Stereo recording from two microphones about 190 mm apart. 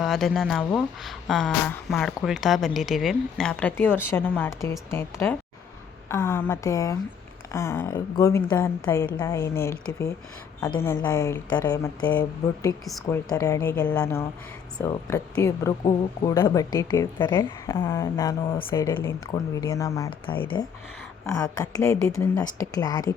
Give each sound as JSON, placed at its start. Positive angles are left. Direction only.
{"t": 0.0, "sound": "a woman's voice", "side_deg": 0}
{"t": 13.3, "sound": "a woman's voice", "side_deg": 15}